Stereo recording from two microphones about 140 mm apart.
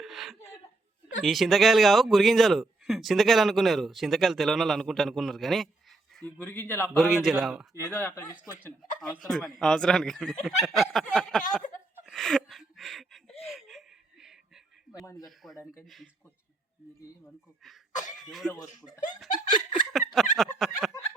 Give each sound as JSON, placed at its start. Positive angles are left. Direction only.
{"t": 0.0, "sound": "a sound", "side_deg": 0}
{"t": 1.2, "sound": "a man's voice", "side_deg": 0}
{"t": 6.9, "sound": "a man's voice", "side_deg": 0}
{"t": 7.8, "sound": "speech", "side_deg": 20}
{"t": 8.8, "sound": "a man's voice", "side_deg": 5}
{"t": 12.0, "sound": "gasp", "side_deg": 0}
{"t": 13.4, "sound": "a sound", "side_deg": 0}
{"t": 15.4, "sound": "a man's voice", "side_deg": 0}
{"t": 17.2, "sound": "a man's voice", "side_deg": 0}
{"t": 18.5, "sound": "speech", "side_deg": 25}
{"t": 19.9, "sound": "fowl", "side_deg": 0}